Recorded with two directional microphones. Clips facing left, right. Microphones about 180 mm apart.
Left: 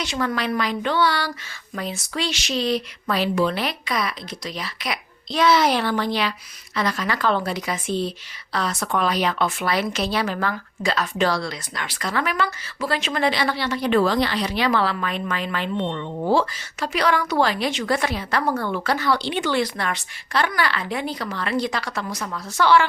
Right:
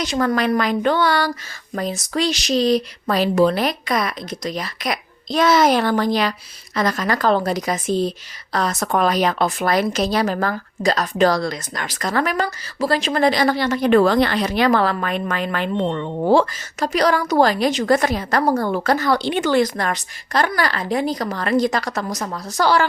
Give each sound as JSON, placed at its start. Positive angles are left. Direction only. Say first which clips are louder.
{"t": 0.0, "sound": "a woman's voice", "louder": "right 5 dB", "side_deg": -40}